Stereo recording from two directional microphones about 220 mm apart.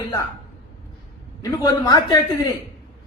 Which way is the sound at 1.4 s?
15° left (ahead or behind).